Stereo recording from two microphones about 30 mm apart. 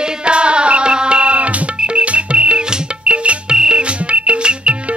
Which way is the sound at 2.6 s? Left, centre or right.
Right.